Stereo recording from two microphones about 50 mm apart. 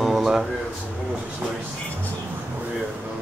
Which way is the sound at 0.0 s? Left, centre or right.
Centre.